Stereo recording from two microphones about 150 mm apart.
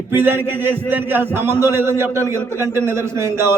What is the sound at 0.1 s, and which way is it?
A man's voice, 15° right (ahead or behind).